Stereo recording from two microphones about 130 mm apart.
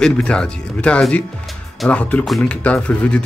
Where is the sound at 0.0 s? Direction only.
5° left (ahead or behind).